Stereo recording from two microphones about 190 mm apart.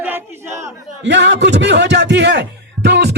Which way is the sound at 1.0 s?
65° right (ahead or behind).